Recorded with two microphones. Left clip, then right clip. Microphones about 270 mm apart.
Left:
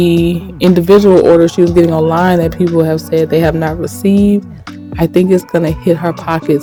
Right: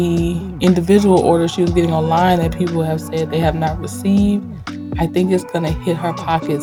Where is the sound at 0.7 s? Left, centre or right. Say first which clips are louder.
Left 7 dB; centre.